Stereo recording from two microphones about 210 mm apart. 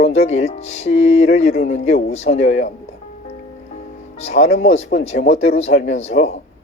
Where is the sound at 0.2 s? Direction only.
30° left (ahead or behind).